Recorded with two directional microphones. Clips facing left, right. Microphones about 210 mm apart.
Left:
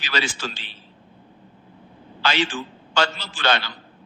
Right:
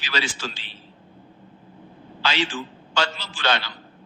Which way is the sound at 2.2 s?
50° left (ahead or behind).